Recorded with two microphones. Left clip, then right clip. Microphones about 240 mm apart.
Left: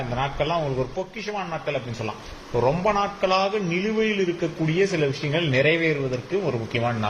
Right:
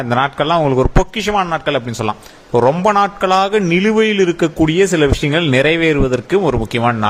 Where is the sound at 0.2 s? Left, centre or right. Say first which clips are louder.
Right 10 dB; right.